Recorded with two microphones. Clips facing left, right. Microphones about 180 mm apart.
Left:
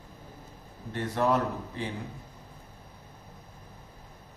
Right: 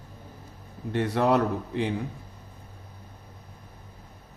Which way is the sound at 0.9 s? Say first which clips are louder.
Right 4 dB; 70° right (ahead or behind).